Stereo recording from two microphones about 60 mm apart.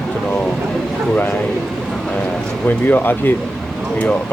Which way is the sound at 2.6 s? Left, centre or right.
Left.